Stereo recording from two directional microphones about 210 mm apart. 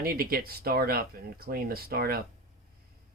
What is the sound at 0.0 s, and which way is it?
Speech, 45° right (ahead or behind).